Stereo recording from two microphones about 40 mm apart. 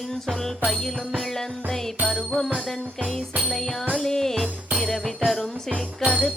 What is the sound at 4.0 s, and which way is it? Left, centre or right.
Music, centre.